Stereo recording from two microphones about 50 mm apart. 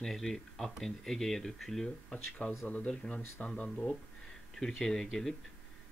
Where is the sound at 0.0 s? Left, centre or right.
Centre.